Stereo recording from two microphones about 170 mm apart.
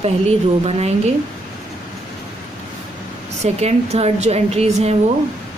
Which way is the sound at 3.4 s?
40° right (ahead or behind).